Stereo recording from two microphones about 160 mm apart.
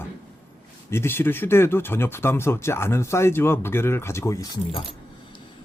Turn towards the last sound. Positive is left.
turn(degrees=20)  # may be behind; listen again after turning